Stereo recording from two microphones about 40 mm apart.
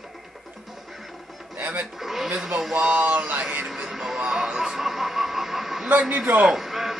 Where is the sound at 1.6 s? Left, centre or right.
Right.